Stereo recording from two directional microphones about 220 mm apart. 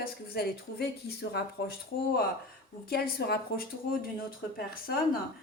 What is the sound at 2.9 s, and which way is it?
Speech, 45° left (ahead or behind).